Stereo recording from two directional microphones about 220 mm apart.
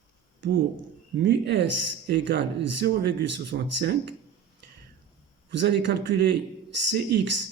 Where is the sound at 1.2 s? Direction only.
50° right (ahead or behind).